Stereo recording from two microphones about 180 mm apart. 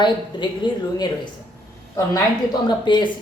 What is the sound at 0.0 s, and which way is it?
A woman's voice, 25° left (ahead or behind).